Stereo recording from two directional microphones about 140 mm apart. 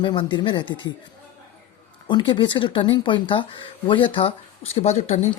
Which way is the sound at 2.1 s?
35° left (ahead or behind).